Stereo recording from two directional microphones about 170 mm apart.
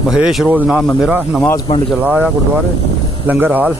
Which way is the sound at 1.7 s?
35° left (ahead or behind).